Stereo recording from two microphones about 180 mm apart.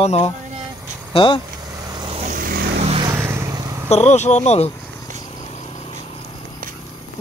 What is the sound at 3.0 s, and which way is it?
Vehicle, 15° right (ahead or behind).